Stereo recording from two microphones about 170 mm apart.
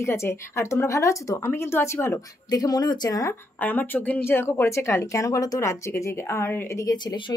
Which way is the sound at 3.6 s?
10° left (ahead or behind).